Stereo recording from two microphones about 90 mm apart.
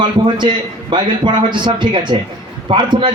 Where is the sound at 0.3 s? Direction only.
60° right (ahead or behind).